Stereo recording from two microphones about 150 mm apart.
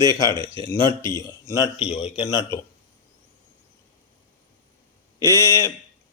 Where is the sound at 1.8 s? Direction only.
45° left (ahead or behind).